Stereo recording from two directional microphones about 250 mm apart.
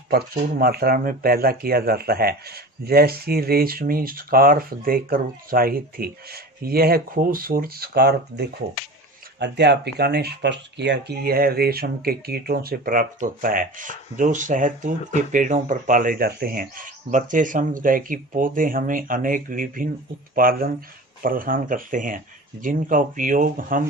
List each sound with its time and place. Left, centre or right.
0.1 s speech: right